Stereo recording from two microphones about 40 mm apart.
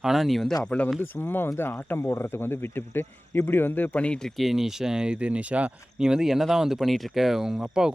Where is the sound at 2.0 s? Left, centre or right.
Left.